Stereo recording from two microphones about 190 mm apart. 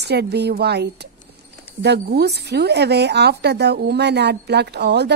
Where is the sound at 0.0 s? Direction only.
60° right (ahead or behind).